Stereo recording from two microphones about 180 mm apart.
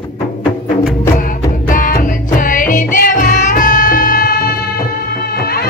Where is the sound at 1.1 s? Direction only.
50° left (ahead or behind).